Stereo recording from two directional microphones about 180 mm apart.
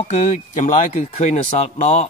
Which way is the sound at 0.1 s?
35° left (ahead or behind).